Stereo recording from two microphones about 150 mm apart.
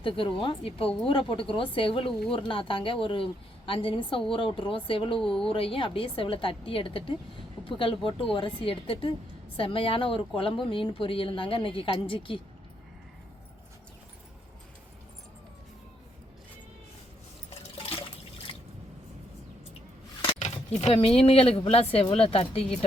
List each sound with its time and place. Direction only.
0.0 s a woman's voice: 35° left (ahead or behind)
5.2 s speech: 5° left (ahead or behind)
5.5 s a woman's voice: 40° left (ahead or behind)
17.5 s liquid: 40° left (ahead or behind)
18.5 s drip: 35° left (ahead or behind)
20.4 s a woman's voice: 45° left (ahead or behind)